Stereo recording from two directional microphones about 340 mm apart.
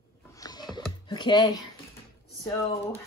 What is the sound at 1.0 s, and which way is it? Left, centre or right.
A woman's voice, centre.